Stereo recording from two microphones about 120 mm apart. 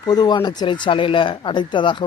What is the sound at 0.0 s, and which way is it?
Speech, 35° left (ahead or behind).